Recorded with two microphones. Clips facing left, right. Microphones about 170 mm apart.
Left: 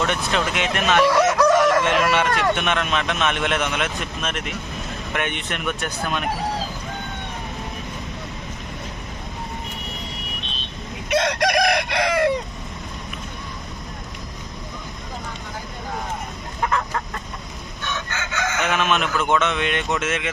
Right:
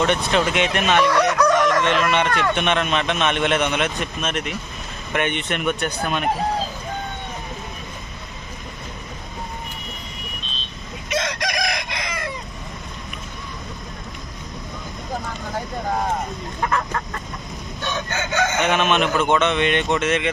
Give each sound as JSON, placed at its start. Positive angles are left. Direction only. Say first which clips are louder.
{"t": 0.1, "sound": "a man's voice", "louder": "right 3 dB", "side_deg": 0}
{"t": 1.5, "sound": "chicken", "louder": "left 2 dB", "side_deg": 5}
{"t": 1.8, "sound": "a man's voice", "louder": "even", "side_deg": 10}
{"t": 11.1, "sound": "chicken", "louder": "left 5 dB", "side_deg": 60}
{"t": 16.6, "sound": "chicken", "louder": "even", "side_deg": 5}
{"t": 17.8, "sound": "chicken", "louder": "right 4 dB", "side_deg": -30}
{"t": 18.7, "sound": "a man's voice", "louder": "right 1 dB", "side_deg": 0}